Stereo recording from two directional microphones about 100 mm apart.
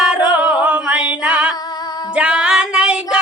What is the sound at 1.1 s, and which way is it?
Music, 15° right (ahead or behind).